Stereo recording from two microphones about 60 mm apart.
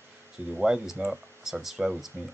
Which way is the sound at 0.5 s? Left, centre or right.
Centre.